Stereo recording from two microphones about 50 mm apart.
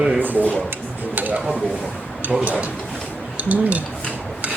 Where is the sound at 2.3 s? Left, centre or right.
Right.